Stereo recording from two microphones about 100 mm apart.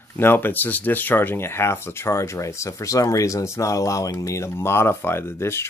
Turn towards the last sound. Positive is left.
turn(degrees=25)  # may be behind; listen again after turning